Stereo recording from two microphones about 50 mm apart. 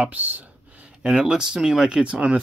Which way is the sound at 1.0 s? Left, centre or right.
Centre.